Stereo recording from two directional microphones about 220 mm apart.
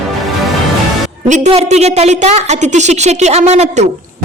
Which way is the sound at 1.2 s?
30° right (ahead or behind).